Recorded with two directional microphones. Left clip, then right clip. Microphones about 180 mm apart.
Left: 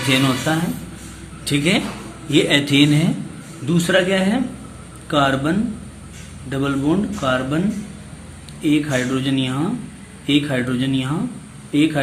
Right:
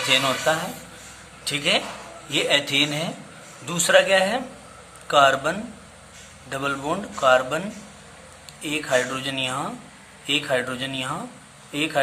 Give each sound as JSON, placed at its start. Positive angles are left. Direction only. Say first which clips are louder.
{"t": 0.1, "sound": "speech", "louder": "left 1 dB", "side_deg": -10}
{"t": 3.7, "sound": "speech", "louder": "even", "side_deg": -20}
{"t": 8.6, "sound": "speech", "louder": "left 3 dB", "side_deg": -15}